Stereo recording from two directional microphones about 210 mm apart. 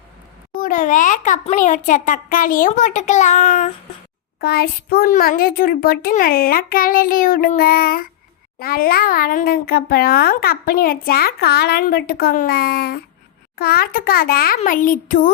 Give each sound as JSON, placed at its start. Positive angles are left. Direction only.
{"t": 0.5, "sound": "a child's voice", "side_deg": 40}
{"t": 4.4, "sound": "a child's voice", "side_deg": 50}